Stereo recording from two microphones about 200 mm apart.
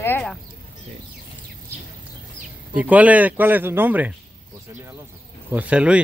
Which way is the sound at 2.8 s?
5° right (ahead or behind).